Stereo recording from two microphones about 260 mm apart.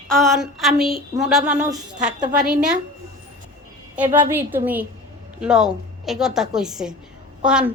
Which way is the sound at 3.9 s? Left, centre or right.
Centre.